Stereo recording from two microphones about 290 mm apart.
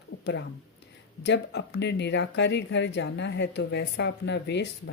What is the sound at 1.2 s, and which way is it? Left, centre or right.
Speech, left.